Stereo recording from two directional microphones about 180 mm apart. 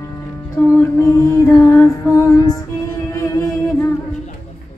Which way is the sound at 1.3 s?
15° left (ahead or behind).